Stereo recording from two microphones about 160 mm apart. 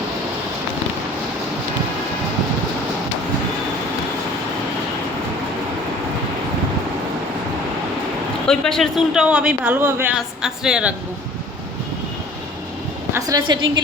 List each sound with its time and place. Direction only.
8.4 s a woman's voice: 5° left (ahead or behind)
13.1 s a woman's voice: 20° right (ahead or behind)